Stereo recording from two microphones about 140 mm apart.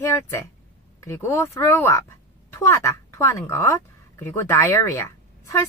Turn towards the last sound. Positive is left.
turn(degrees=20)  # may be behind; listen again after turning